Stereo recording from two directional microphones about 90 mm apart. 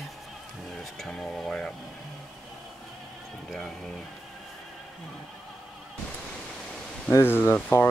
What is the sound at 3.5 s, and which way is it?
Speech, 5° left (ahead or behind).